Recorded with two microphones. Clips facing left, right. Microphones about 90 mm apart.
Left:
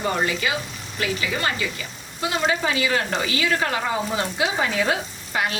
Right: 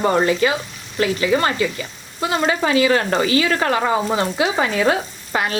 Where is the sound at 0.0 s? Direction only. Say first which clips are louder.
Right 7 dB; 40° right (ahead or behind).